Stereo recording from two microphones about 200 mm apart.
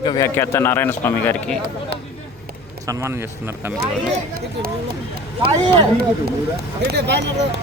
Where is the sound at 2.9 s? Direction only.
15° right (ahead or behind).